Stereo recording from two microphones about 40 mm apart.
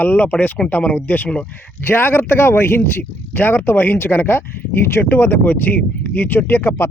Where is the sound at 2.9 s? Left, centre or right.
Left.